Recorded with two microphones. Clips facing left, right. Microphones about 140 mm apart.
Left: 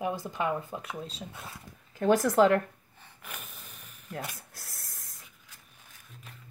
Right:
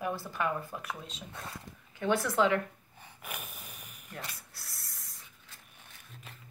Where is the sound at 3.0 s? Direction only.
10° right (ahead or behind).